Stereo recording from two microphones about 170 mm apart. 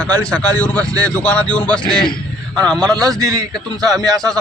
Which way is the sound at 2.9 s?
20° right (ahead or behind).